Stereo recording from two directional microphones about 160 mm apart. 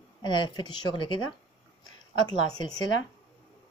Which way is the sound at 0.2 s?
30° left (ahead or behind).